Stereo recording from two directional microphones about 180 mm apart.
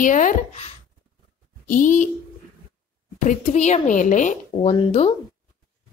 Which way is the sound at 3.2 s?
40° left (ahead or behind).